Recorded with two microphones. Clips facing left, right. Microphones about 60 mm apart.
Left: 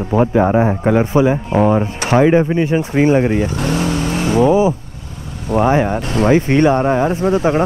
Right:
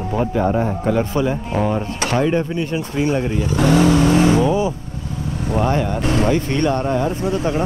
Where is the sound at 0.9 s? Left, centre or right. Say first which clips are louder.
Left 6 dB; left.